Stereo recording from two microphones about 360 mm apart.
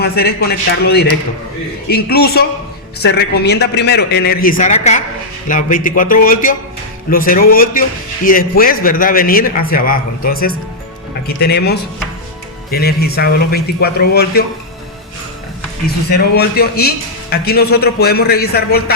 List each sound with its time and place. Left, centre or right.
0.0 s a man's voice: left
16.0 s a man's voice: left